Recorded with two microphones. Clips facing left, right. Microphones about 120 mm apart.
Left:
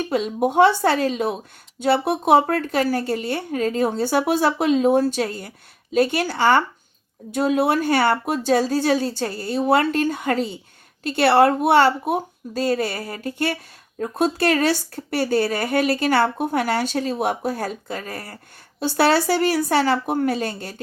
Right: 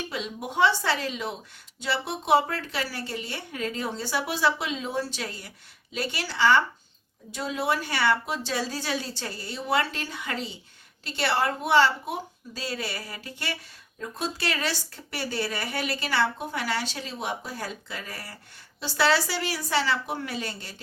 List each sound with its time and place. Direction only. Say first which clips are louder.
0.1 s speech: left 12 dB; 50° left (ahead or behind)